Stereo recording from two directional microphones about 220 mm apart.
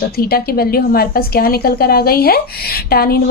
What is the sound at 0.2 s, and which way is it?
A woman's voice, 45° left (ahead or behind).